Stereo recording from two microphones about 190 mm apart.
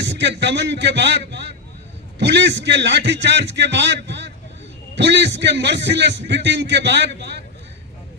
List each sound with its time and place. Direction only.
0.0 s a man's voice: 65° right (ahead or behind)